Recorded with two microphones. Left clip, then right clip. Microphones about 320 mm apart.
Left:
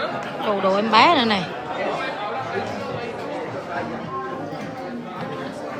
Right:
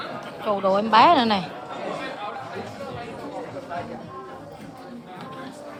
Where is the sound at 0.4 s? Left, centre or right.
Centre.